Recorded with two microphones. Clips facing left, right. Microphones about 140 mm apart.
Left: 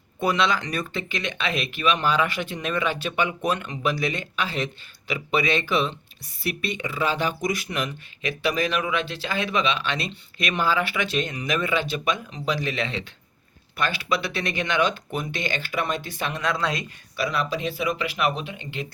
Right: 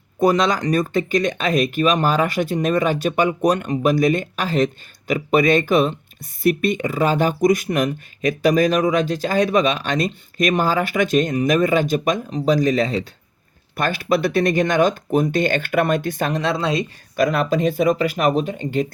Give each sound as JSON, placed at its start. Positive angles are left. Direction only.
{"t": 0.2, "sound": "speech", "side_deg": -40}
{"t": 16.4, "sound": "speech", "side_deg": -25}
{"t": 17.2, "sound": "speech", "side_deg": -50}